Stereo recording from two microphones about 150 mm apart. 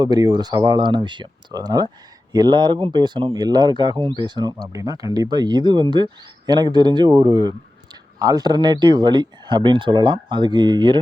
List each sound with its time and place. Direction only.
0.0 s speech: 25° right (ahead or behind)